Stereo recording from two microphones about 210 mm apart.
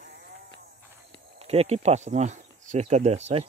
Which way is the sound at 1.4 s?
30° right (ahead or behind).